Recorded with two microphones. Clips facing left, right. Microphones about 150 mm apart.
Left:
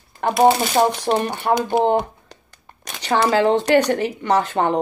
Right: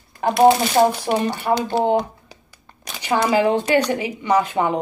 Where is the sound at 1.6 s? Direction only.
20° left (ahead or behind).